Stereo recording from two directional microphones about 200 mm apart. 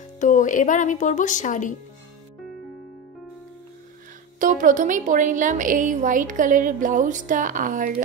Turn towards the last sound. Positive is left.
turn(degrees=-40)  # may be behind; listen again after turning